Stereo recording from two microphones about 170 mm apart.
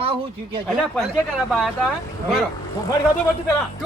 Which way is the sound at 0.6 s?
5° left (ahead or behind).